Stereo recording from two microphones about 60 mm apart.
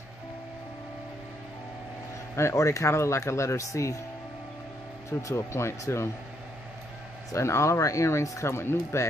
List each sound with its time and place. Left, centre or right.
2.5 s speech: left
5.2 s speech: left
7.3 s speech: left